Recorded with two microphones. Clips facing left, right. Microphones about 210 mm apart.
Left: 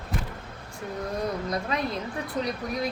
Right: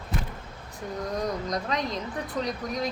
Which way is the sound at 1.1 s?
5° left (ahead or behind).